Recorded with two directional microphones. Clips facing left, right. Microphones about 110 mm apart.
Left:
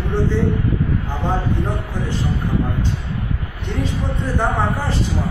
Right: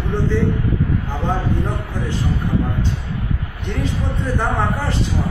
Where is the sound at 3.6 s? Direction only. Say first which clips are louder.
Even; 15° left (ahead or behind).